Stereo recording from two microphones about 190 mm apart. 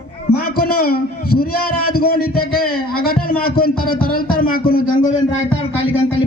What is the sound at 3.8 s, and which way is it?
Music, 50° left (ahead or behind).